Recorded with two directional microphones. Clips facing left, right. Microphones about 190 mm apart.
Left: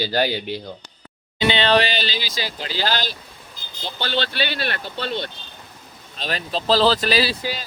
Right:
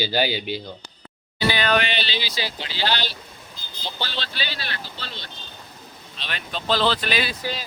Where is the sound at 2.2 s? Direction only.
45° left (ahead or behind).